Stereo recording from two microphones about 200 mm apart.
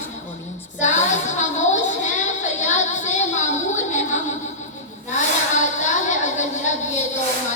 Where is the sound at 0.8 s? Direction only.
35° left (ahead or behind).